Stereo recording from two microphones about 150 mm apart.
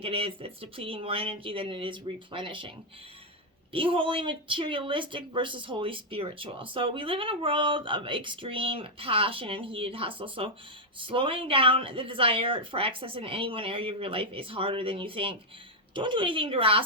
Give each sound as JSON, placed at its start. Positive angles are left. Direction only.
{"t": 0.0, "sound": "speech", "side_deg": -40}